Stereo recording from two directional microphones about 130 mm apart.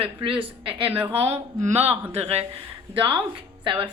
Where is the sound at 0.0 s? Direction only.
45° right (ahead or behind).